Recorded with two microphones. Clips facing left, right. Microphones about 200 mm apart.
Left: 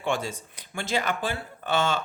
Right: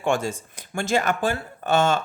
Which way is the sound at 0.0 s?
50° right (ahead or behind).